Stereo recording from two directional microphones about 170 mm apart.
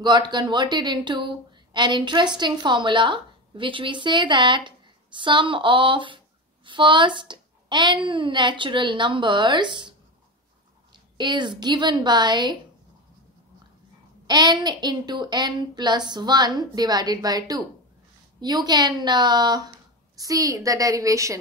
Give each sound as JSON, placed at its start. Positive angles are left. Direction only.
{"t": 0.0, "sound": "a woman's voice", "side_deg": -25}
{"t": 14.2, "sound": "speech", "side_deg": -25}